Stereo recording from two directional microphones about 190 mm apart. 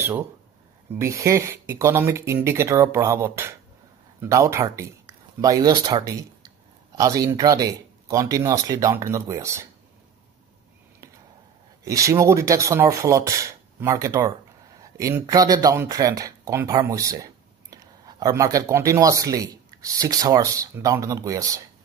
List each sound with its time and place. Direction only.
0.0 s speech: 10° right (ahead or behind)
11.8 s speech: 15° right (ahead or behind)